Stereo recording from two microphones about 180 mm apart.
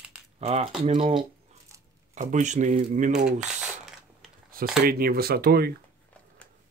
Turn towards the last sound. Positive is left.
turn(degrees=-60)  # may be behind; listen again after turning